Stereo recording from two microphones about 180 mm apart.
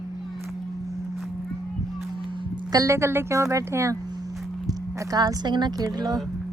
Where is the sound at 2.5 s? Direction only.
20° right (ahead or behind).